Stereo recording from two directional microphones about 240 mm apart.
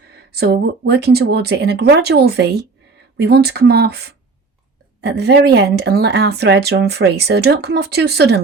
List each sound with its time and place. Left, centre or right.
0.3 s speech: right